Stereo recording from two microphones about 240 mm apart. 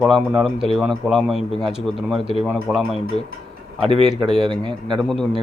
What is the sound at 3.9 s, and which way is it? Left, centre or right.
Speech, centre.